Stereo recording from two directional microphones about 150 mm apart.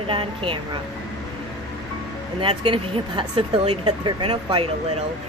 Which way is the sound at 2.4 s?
35° right (ahead or behind).